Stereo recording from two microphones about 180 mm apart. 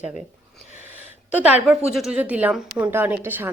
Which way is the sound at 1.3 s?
10° right (ahead or behind).